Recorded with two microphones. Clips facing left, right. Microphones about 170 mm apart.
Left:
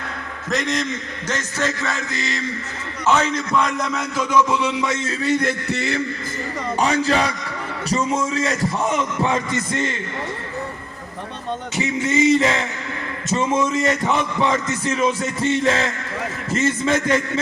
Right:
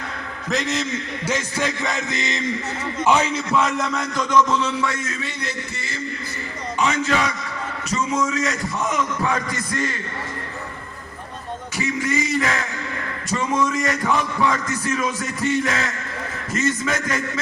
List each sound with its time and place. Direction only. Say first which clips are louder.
0.5 s a man's voice: left 1 dB; centre (ahead or behind); by 4.9 s 15° left (ahead or behind)
5.4 s a sound: left 8 dB; 60° left (ahead or behind)
6.7 s a man's voice: left 2 dB; 35° left (ahead or behind)
11.8 s speech: left 4 dB; 25° left (ahead or behind)